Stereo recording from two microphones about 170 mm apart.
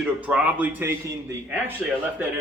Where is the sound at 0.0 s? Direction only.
5° right (ahead or behind).